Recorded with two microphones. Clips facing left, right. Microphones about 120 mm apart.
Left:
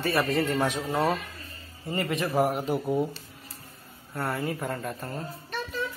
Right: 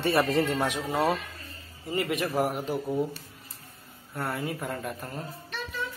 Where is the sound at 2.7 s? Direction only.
15° left (ahead or behind).